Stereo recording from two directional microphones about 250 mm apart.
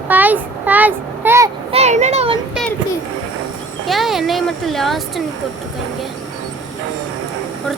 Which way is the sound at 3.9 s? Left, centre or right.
Centre.